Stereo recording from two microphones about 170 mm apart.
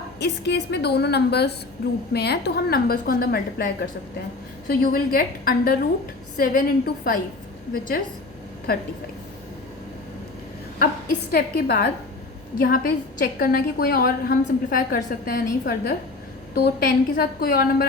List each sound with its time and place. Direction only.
0.2 s a woman's voice: 75° left (ahead or behind); by 8.0 s 55° left (ahead or behind)
11.3 s a woman's voice: 65° left (ahead or behind)